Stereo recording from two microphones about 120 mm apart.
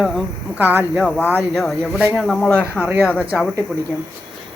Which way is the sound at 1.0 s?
15° left (ahead or behind).